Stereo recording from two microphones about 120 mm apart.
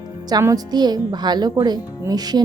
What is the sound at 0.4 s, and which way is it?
Speech, 35° right (ahead or behind).